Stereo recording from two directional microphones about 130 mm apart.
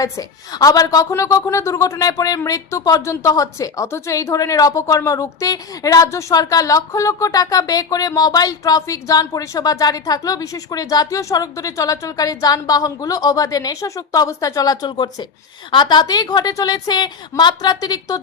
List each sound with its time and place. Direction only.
0.0 s a woman's voice: 30° left (ahead or behind)